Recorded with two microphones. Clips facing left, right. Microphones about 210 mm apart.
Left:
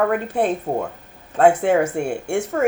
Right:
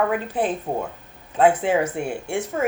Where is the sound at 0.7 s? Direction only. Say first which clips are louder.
Left 3 dB; 70° left (ahead or behind).